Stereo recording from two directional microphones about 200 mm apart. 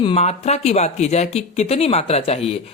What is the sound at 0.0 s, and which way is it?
Speech, 30° left (ahead or behind).